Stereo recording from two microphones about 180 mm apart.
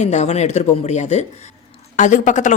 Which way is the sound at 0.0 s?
40° left (ahead or behind).